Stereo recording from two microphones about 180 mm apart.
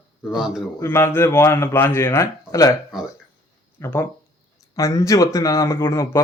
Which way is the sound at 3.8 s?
15° left (ahead or behind).